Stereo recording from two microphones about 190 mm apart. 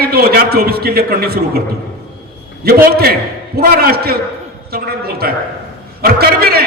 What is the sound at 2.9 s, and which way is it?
A man's voice, 55° right (ahead or behind).